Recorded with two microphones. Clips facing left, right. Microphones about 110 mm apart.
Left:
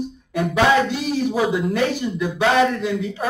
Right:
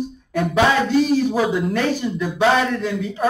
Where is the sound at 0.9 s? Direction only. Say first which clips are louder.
Right 5 dB; 5° left (ahead or behind).